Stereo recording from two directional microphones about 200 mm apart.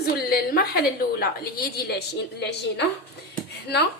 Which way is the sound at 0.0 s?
50° left (ahead or behind).